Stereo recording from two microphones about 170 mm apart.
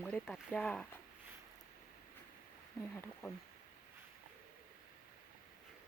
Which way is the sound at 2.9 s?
10° left (ahead or behind).